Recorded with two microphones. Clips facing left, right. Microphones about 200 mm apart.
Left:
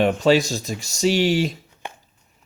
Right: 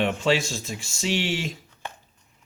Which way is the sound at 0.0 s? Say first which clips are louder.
Left 6 dB; 40° left (ahead or behind).